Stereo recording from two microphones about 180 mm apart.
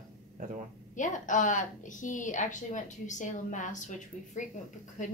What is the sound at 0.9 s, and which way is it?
A woman's voice, 45° left (ahead or behind).